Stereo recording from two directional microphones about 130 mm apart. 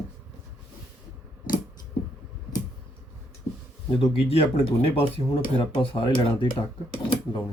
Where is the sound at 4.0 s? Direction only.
50° left (ahead or behind).